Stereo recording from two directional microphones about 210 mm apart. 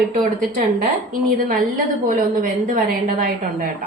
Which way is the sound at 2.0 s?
40° right (ahead or behind).